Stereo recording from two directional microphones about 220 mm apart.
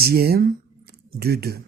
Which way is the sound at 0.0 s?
45° right (ahead or behind).